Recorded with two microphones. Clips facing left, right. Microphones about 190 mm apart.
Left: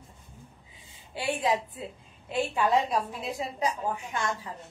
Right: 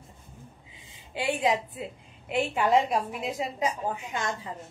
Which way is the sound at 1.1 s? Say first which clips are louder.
Right 2 dB; 20° right (ahead or behind).